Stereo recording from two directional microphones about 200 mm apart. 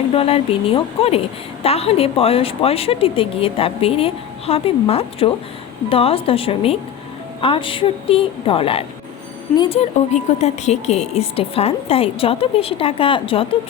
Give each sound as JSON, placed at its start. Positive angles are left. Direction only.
{"t": 0.1, "sound": "a woman's voice", "side_deg": 30}